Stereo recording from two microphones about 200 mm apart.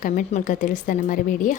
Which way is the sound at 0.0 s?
40° left (ahead or behind).